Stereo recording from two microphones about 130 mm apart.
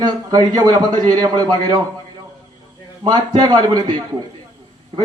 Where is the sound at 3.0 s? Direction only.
30° right (ahead or behind).